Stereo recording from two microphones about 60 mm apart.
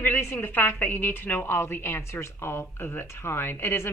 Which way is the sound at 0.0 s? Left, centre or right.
Left.